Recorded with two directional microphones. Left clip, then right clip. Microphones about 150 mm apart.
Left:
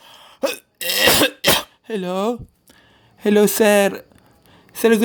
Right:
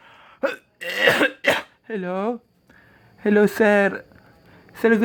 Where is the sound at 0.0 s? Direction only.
15° left (ahead or behind).